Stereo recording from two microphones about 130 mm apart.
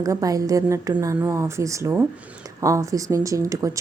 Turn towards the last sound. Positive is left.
turn(degrees=-25)  # may be behind; listen again after turning